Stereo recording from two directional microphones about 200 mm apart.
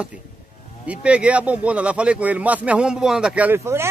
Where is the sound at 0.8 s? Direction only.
5° right (ahead or behind).